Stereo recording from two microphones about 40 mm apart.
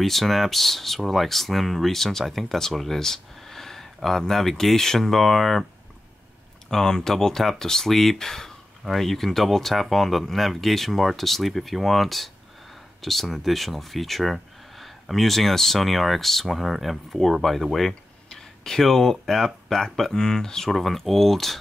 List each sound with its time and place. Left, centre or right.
0.0 s speech: centre
6.7 s speech: centre